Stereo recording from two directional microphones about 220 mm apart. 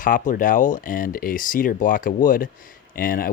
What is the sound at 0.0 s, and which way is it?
Speech, 35° left (ahead or behind).